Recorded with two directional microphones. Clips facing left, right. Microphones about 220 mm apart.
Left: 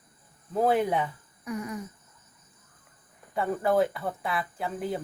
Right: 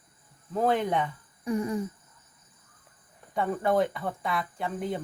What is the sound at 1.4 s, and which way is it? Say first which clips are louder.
Speech: right 5 dB; 30° right (ahead or behind).